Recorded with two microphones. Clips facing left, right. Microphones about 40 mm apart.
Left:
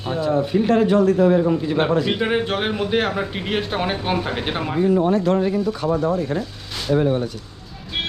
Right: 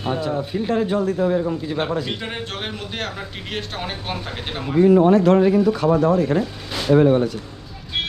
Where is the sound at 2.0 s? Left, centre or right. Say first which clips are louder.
Left 8 dB; centre.